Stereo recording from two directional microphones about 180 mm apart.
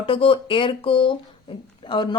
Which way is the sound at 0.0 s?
30° left (ahead or behind).